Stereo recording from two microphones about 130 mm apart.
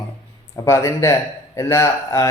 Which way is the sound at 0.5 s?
20° left (ahead or behind).